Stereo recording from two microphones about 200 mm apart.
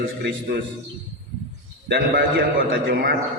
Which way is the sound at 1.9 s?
50° right (ahead or behind).